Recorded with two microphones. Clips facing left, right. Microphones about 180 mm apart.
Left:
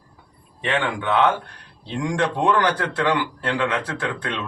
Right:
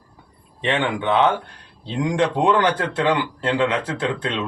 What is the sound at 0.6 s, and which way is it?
Speech, 20° right (ahead or behind).